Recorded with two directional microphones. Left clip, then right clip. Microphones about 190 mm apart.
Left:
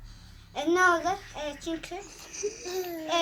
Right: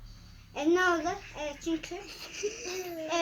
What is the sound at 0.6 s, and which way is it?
A child's voice, 15° right (ahead or behind).